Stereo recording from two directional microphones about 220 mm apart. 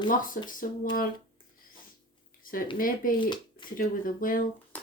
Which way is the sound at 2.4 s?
40° left (ahead or behind).